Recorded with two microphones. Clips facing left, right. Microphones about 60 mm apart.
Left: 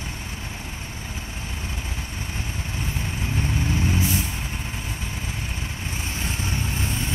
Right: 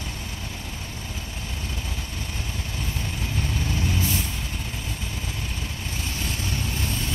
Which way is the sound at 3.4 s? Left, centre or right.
Left.